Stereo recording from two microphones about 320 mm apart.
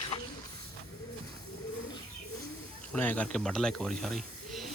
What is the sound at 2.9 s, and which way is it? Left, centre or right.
Speech, centre.